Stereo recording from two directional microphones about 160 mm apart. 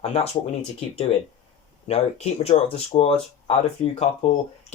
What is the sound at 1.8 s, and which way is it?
Speech, 40° left (ahead or behind).